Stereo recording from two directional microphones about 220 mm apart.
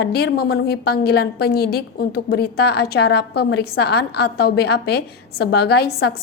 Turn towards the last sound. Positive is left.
turn(degrees=45)  # may be behind; listen again after turning